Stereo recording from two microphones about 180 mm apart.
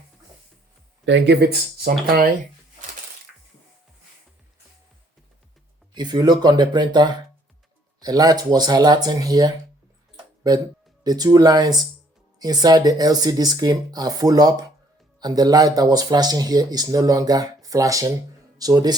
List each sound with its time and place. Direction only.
1.0 s speech: 80° right; by 2.3 s 55° right (ahead or behind)
5.9 s speech: 25° right (ahead or behind)